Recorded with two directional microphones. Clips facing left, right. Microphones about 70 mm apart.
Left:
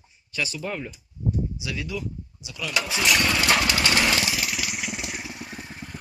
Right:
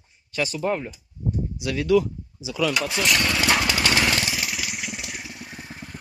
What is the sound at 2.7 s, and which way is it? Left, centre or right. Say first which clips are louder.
Speech: left 4 dB; centre.